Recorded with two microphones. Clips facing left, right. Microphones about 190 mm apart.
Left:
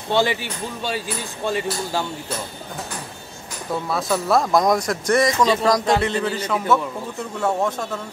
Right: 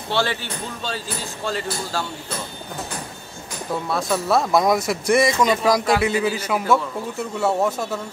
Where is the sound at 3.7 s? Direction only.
Centre (ahead or behind).